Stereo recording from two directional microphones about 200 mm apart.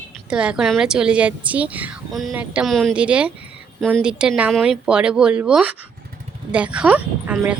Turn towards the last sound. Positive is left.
turn(degrees=-5)  # may be behind; listen again after turning